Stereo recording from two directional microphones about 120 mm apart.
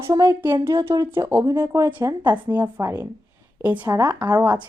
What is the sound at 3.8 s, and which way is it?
Speech, 25° right (ahead or behind).